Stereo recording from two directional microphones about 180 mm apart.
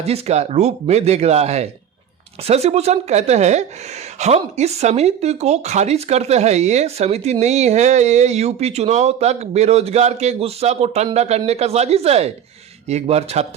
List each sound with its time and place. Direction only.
0.0 s speech: 35° right (ahead or behind)